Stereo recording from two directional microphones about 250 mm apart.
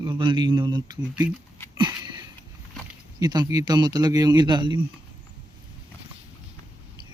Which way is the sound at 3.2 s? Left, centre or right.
Centre.